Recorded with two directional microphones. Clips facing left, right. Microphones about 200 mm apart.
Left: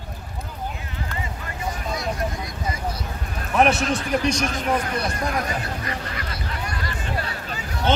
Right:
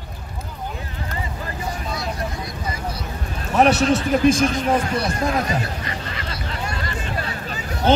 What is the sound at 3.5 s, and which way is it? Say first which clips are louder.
Speech: right 3 dB; centre (ahead or behind).